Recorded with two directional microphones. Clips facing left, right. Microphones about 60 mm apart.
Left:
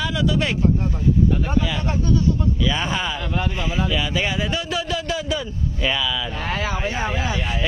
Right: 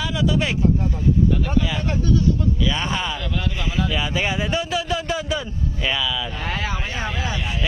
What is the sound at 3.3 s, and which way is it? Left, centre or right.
Speech, left.